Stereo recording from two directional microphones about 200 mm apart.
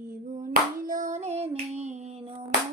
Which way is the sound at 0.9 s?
40° right (ahead or behind).